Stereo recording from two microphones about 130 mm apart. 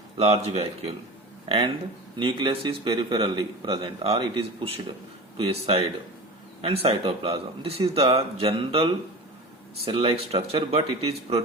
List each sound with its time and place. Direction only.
0.2 s speech: 55° right (ahead or behind)
1.5 s a man's voice: 40° right (ahead or behind)